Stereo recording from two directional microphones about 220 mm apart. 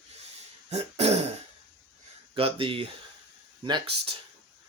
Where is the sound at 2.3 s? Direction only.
25° right (ahead or behind).